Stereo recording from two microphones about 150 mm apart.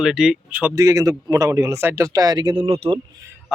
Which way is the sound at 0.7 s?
20° right (ahead or behind).